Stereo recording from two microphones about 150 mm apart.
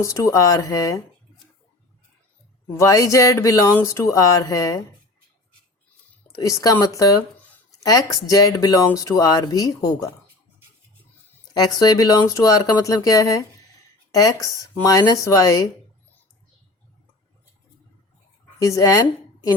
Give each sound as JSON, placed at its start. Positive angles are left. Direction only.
{"t": 0.0, "sound": "speech", "side_deg": 20}
{"t": 2.7, "sound": "speech", "side_deg": 20}
{"t": 6.2, "sound": "speech", "side_deg": 20}
{"t": 11.5, "sound": "speech", "side_deg": 25}
{"t": 18.6, "sound": "speech", "side_deg": 20}